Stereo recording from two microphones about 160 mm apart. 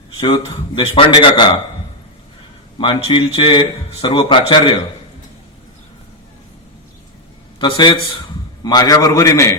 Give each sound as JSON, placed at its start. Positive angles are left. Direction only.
{"t": 0.2, "sound": "speech", "side_deg": 30}
{"t": 2.7, "sound": "speech", "side_deg": 30}
{"t": 7.6, "sound": "a man's voice", "side_deg": 30}